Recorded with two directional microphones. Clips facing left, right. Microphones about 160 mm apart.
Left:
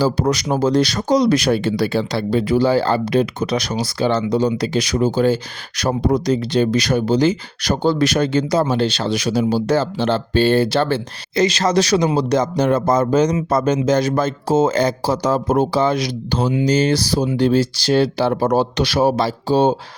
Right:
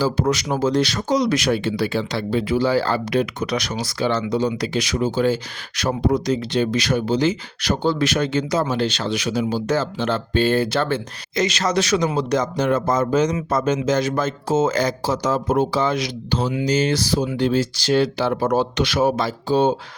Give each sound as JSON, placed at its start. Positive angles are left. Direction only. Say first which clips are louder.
{"t": 0.0, "sound": "speech", "louder": "left 2 dB", "side_deg": 35}
{"t": 16.5, "sound": "speech", "louder": "left 4 dB", "side_deg": 30}